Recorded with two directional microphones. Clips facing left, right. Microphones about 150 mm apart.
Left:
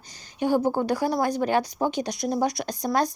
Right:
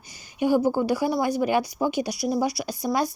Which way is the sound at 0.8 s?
10° right (ahead or behind).